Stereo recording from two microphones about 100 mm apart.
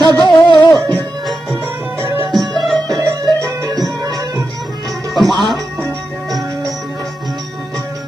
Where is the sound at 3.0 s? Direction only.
40° right (ahead or behind).